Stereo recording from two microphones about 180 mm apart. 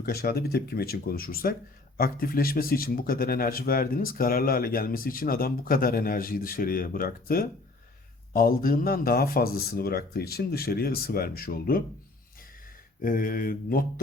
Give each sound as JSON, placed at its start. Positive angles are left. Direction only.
{"t": 0.0, "sound": "a man's voice", "side_deg": 55}
{"t": 13.0, "sound": "a man's voice", "side_deg": 50}